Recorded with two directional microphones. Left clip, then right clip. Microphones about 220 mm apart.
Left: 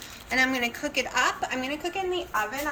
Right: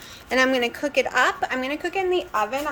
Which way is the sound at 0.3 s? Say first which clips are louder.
Right 4 dB; 25° right (ahead or behind).